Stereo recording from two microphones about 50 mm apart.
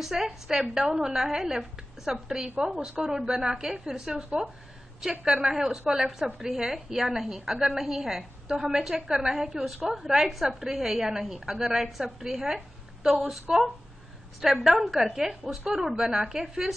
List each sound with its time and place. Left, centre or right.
0.0 s a woman's voice: centre